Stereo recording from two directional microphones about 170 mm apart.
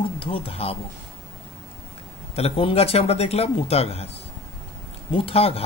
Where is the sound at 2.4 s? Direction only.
35° left (ahead or behind).